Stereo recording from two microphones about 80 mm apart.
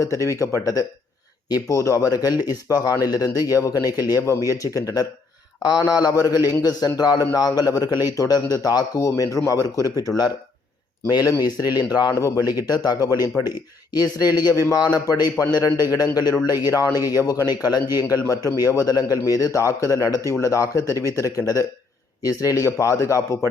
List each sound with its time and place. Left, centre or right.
0.0 s speech: left
2.6 s speech: left
9.0 s speech: left
11.3 s speech: left
18.1 s speech: left
20.1 s speech: left
20.4 s speech: left